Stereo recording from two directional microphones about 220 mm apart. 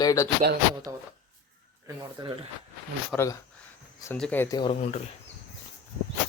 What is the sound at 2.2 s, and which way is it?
Speech, 20° right (ahead or behind).